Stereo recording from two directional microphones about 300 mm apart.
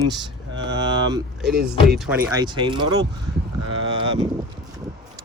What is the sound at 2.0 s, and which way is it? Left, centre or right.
Speech, centre.